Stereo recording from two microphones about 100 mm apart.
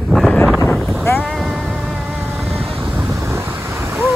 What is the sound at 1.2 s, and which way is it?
Music, centre (ahead or behind).